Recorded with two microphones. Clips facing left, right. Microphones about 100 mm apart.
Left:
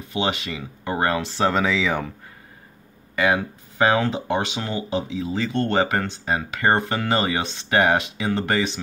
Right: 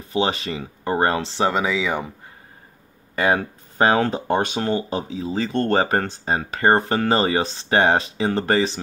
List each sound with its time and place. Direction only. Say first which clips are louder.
0.1 s speech: right 3 dB; 35° right (ahead or behind)
1.4 s speech: even; 10° right (ahead or behind)
3.2 s speech: right 1 dB; 40° right (ahead or behind)